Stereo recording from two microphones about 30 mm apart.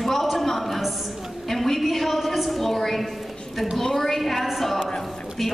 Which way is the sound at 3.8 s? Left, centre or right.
Centre.